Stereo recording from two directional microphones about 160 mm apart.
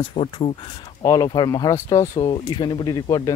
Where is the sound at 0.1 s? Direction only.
35° left (ahead or behind).